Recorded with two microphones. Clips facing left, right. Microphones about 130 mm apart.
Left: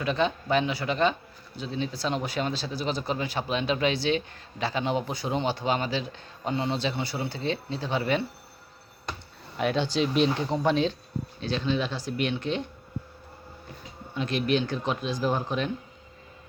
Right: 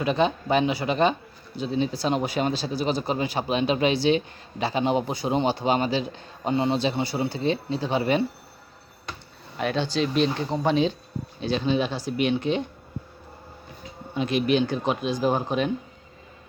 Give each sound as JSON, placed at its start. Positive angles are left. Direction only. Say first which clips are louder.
{"t": 0.0, "sound": "a man's voice", "louder": "right 4 dB", "side_deg": -15}
{"t": 9.6, "sound": "speech", "louder": "right 1 dB", "side_deg": 10}
{"t": 10.6, "sound": "a man's voice", "louder": "right 4 dB", "side_deg": -5}
{"t": 14.1, "sound": "a man's voice", "louder": "right 3 dB", "side_deg": -10}